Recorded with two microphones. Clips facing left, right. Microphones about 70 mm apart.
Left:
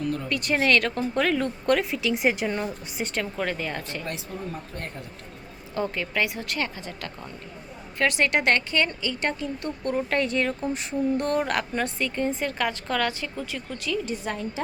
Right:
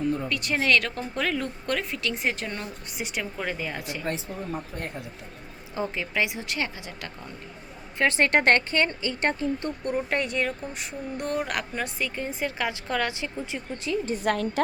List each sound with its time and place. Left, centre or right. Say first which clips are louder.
0.0 s speech: right 2 dB; right
0.3 s speech: left 5 dB; centre
2.8 s speech: left 3 dB; centre
4.0 s speech: right 2 dB; right
5.7 s speech: left 1 dB; centre
7.9 s speech: right 1 dB; right
9.8 s speech: left 3 dB; centre; by 14.2 s right
14.2 s a woman's voice: right 5 dB; right